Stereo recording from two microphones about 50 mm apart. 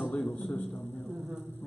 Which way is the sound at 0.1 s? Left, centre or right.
Left.